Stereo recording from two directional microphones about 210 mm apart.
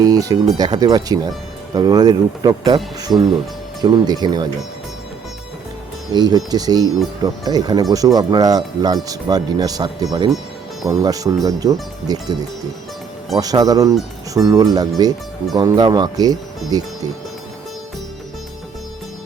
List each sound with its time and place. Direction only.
0.0 s speech: 15° right (ahead or behind)
6.1 s speech: 20° right (ahead or behind)